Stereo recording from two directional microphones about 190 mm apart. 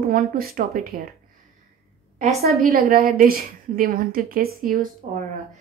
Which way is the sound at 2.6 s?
50° right (ahead or behind).